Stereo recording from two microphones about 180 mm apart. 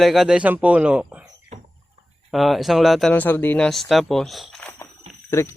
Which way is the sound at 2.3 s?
Centre (ahead or behind).